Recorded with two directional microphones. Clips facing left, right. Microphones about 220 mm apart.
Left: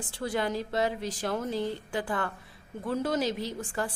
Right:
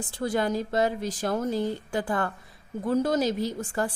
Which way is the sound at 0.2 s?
40° right (ahead or behind).